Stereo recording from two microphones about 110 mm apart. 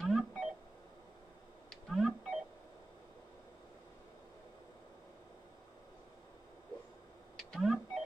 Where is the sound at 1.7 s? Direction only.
Centre (ahead or behind).